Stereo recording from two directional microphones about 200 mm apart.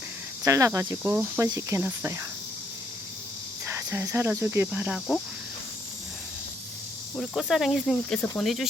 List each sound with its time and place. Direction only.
0.4 s speech: 15° right (ahead or behind)
3.7 s speech: 15° right (ahead or behind)
7.2 s speech: centre (ahead or behind)